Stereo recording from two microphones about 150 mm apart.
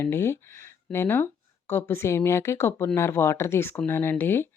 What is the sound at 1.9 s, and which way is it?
Speech, 20° left (ahead or behind).